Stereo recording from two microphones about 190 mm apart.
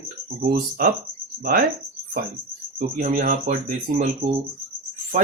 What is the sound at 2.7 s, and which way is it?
Speech, 45° right (ahead or behind).